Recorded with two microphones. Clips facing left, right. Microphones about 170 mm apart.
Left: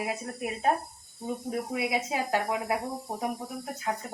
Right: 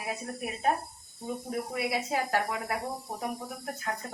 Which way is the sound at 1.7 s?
15° left (ahead or behind).